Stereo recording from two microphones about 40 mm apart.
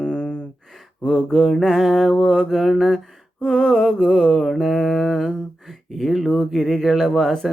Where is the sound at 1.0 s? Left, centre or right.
Centre.